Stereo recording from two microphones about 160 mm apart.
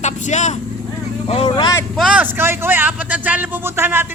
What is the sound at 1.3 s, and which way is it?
Speech, 35° left (ahead or behind).